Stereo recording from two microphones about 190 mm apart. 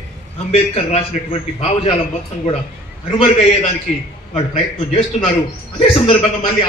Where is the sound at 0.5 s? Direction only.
35° left (ahead or behind).